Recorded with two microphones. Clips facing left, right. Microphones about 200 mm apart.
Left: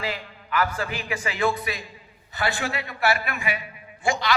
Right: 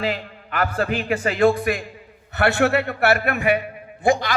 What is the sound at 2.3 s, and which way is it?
A man's voice, 65° right (ahead or behind).